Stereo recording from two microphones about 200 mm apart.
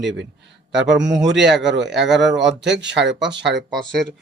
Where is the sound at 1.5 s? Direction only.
60° right (ahead or behind).